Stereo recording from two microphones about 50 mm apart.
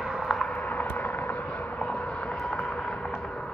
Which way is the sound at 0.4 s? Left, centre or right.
Left.